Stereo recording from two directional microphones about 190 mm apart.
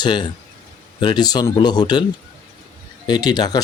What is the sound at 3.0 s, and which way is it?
Speech, 20° left (ahead or behind).